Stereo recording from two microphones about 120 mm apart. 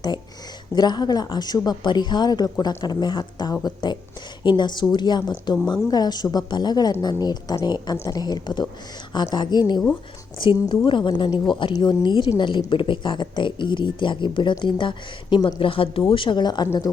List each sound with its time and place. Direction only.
0.8 s a woman's voice: 35° left (ahead or behind)